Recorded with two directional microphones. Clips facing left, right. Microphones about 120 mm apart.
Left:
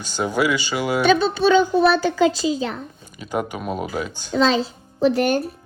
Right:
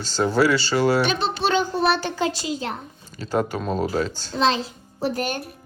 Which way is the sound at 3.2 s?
15° left (ahead or behind).